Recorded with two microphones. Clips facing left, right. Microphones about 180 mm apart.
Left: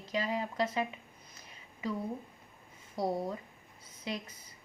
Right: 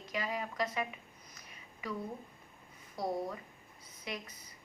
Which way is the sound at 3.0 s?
25° left (ahead or behind).